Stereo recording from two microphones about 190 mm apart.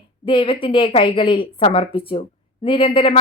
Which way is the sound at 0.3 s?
25° left (ahead or behind).